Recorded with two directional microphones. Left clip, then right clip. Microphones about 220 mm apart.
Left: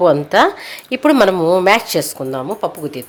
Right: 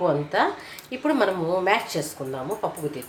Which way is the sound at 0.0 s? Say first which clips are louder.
Left 11 dB; 45° left (ahead or behind).